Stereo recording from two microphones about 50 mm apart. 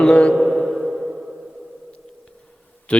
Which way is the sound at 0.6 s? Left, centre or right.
Centre.